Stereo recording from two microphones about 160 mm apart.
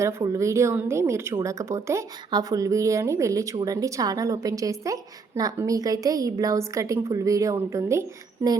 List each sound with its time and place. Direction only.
0.0 s a woman's voice: 20° right (ahead or behind)